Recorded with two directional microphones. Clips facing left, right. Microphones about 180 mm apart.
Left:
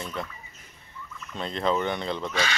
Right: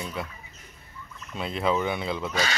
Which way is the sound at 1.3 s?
5° right (ahead or behind).